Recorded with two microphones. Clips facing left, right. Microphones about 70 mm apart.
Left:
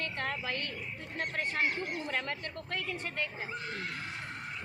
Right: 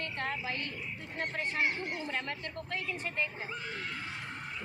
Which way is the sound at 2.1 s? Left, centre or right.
Left.